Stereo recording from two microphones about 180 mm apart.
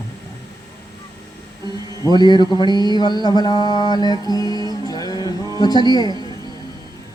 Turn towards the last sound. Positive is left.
turn(degrees=20)  # may be behind; listen again after turning